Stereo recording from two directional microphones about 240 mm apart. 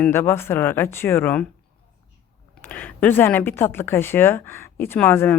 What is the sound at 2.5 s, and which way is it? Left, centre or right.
Speech, centre.